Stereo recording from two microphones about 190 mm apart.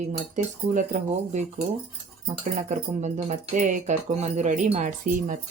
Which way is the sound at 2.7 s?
40° right (ahead or behind).